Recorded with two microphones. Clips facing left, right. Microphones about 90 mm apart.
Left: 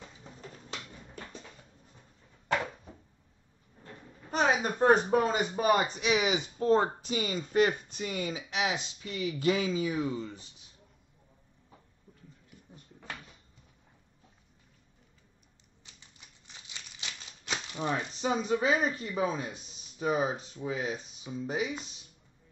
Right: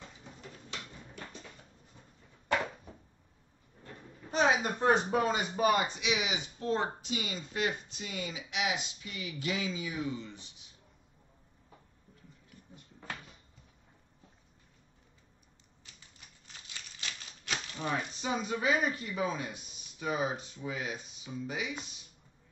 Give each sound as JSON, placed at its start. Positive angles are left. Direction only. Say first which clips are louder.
{"t": 0.4, "sound": "a sound", "louder": "left 2 dB", "side_deg": 40}
{"t": 4.3, "sound": "a man's voice", "louder": "left 1 dB", "side_deg": 45}
{"t": 16.4, "sound": "speech", "louder": "even", "side_deg": 20}